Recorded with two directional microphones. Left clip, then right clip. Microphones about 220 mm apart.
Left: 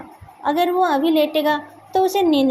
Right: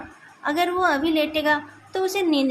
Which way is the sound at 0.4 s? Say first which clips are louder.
Left 3 dB; 10° left (ahead or behind).